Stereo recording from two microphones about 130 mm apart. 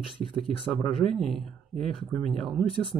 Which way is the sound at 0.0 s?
45° left (ahead or behind).